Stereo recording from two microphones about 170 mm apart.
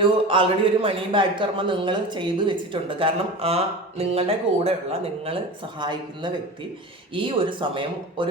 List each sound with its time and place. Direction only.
0.0 s speech: 30° right (ahead or behind)